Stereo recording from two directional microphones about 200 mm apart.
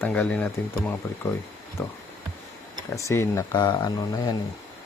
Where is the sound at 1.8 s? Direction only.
10° left (ahead or behind).